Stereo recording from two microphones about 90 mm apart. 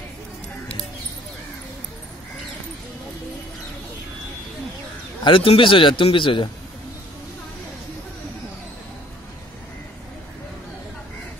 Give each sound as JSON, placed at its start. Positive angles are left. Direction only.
{"t": 5.2, "sound": "a man's voice", "side_deg": 75}